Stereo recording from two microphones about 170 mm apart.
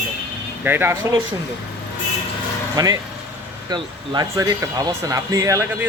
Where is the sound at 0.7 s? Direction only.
10° right (ahead or behind).